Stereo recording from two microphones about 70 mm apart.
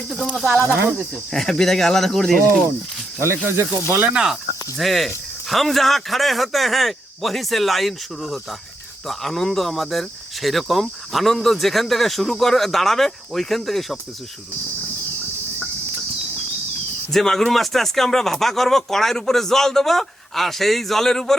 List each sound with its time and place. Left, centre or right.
0.5 s speech: right
1.1 s speech: centre
3.2 s speech: right
4.1 s speech: centre
17.1 s speech: centre